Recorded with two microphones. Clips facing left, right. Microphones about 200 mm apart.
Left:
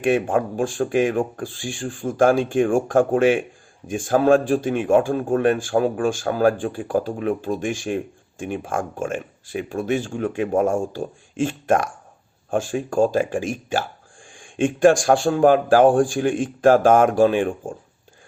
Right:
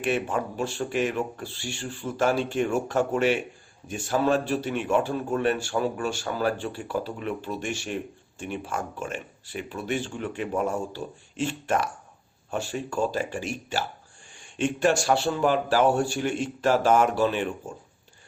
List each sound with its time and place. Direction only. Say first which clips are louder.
0.0 s speech: left 7 dB; 50° left (ahead or behind)